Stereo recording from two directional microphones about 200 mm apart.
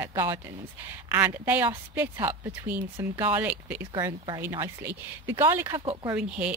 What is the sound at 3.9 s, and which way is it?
A woman's voice, 15° right (ahead or behind).